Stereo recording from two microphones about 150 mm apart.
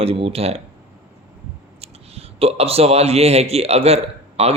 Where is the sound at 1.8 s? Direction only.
40° right (ahead or behind).